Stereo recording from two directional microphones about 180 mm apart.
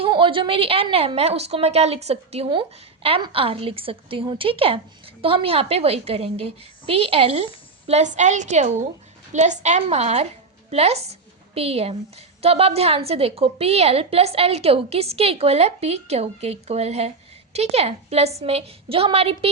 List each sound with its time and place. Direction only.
0.0 s a woman's voice: 30° right (ahead or behind)